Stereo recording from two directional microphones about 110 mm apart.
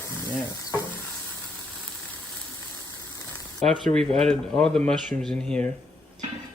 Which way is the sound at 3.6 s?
5° left (ahead or behind).